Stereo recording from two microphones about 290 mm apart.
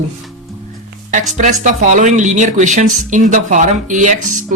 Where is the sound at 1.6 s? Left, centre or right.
Right.